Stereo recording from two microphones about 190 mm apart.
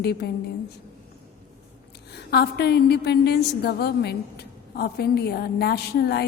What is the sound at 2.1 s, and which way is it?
A woman's voice, 60° left (ahead or behind).